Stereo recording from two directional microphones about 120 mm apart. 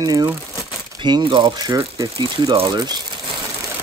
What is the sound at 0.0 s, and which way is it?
Speech, 30° right (ahead or behind).